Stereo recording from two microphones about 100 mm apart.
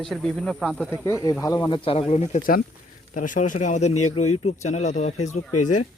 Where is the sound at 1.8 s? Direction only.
90° left.